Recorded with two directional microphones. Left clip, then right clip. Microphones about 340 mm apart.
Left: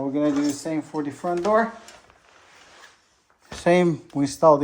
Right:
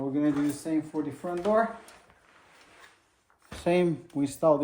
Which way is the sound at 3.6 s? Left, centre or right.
Left.